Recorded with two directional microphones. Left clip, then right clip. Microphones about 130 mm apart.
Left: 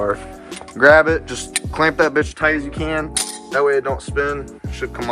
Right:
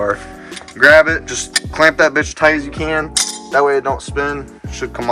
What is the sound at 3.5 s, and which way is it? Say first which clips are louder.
Speech: right 3 dB; 25° right (ahead or behind).